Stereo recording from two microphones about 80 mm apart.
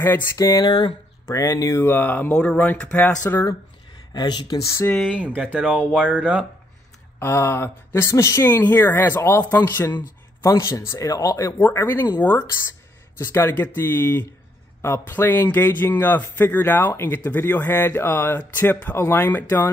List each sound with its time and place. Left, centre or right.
0.4 s speech: left
0.7 s speech: left
1.3 s speech: left
1.9 s a man's voice: left
4.1 s speech: left
4.6 s speech: left
5.1 s speech: centre
7.2 s speech: left
8.5 s a man's voice: left
10.4 s speech: left
11.7 s a man's voice: left